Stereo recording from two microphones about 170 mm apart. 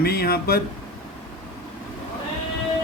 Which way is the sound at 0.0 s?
65° left (ahead or behind).